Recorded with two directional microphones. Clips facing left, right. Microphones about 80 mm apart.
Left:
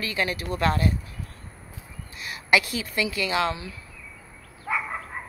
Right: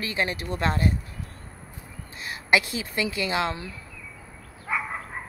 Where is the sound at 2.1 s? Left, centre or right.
Right.